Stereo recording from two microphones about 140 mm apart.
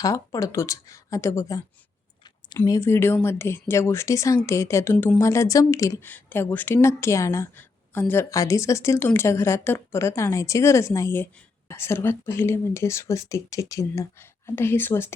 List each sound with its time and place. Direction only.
0.0 s speech: 25° left (ahead or behind)